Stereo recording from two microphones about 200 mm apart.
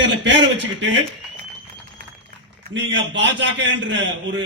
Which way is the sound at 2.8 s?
60° right (ahead or behind).